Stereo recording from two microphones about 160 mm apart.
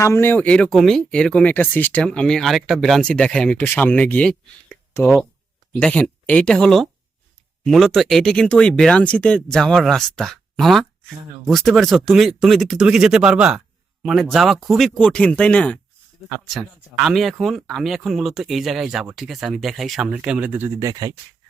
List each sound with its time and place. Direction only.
0.0 s speech: 15° left (ahead or behind)
5.8 s speech: 5° left (ahead or behind); by 20.7 s 10° right (ahead or behind)
20.8 s speech: 25° right (ahead or behind)